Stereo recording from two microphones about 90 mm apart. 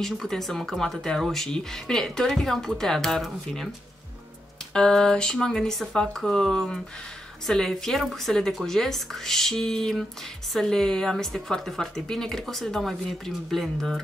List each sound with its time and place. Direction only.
0.0 s speech: 5° left (ahead or behind)
4.7 s speech: 5° left (ahead or behind)